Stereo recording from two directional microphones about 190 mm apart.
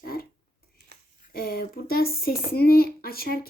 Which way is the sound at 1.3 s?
50° left (ahead or behind).